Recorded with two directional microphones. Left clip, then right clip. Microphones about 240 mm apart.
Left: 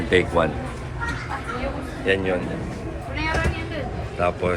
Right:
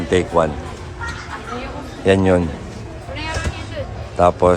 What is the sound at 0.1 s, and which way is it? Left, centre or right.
Speech, centre.